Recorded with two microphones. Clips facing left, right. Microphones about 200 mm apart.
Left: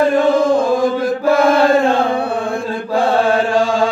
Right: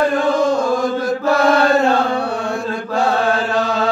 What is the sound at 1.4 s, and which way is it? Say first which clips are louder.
Chant: left 2 dB; 50° left (ahead or behind).